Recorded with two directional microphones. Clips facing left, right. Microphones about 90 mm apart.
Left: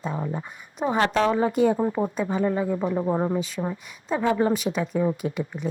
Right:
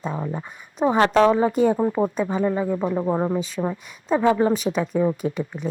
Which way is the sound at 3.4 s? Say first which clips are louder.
Right 2 dB; 25° right (ahead or behind).